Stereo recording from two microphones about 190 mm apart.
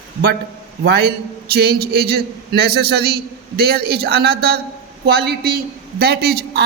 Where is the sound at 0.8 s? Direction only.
55° right (ahead or behind).